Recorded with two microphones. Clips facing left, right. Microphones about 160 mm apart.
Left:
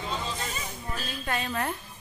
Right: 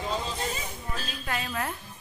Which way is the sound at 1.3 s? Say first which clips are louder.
Left 2 dB; centre (ahead or behind).